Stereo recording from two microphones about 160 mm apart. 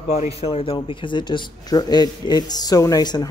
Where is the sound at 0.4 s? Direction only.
35° left (ahead or behind).